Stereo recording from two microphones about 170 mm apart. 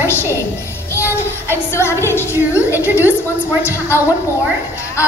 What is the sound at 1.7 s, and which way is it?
A woman's voice, 15° left (ahead or behind).